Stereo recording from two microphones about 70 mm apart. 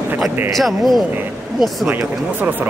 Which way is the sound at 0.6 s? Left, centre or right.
Centre.